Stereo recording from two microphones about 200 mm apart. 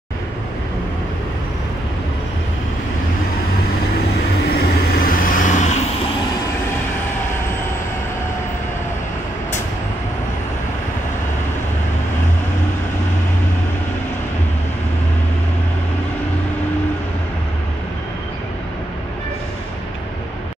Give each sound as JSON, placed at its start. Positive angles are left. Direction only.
{"t": 4.6, "sound": "vehicle", "side_deg": 50}